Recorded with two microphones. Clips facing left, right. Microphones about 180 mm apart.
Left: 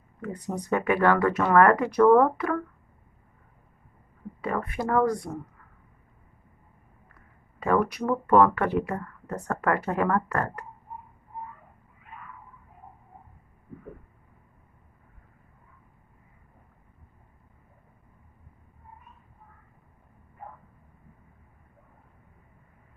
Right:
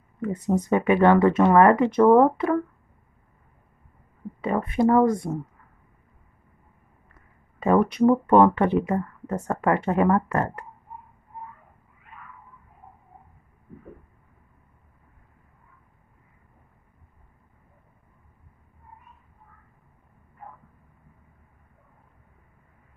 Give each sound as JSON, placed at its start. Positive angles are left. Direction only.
{"t": 0.2, "sound": "speech", "side_deg": -25}
{"t": 4.4, "sound": "speech", "side_deg": -20}
{"t": 7.6, "sound": "speech", "side_deg": -25}